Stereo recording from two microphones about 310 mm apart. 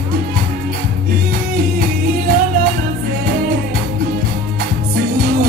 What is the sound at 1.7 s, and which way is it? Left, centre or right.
Music, right.